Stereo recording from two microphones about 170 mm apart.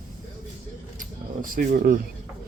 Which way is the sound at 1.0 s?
55° right (ahead or behind).